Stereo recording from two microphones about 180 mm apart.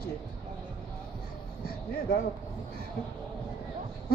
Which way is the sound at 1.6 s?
60° left (ahead or behind).